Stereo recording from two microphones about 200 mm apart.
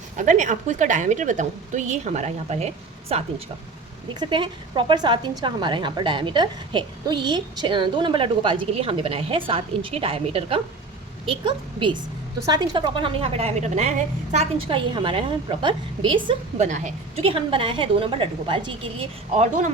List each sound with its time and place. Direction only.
0.2 s a woman's voice: 40° right (ahead or behind)
16.6 s a woman's voice: 40° right (ahead or behind)